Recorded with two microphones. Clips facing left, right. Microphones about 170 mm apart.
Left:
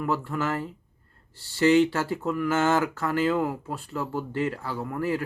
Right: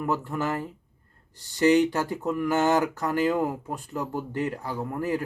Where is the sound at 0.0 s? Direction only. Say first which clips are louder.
Even; 20° right (ahead or behind).